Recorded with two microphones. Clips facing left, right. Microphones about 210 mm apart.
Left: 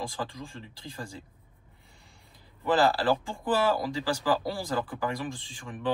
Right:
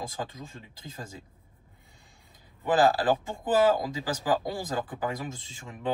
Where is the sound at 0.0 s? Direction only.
20° right (ahead or behind).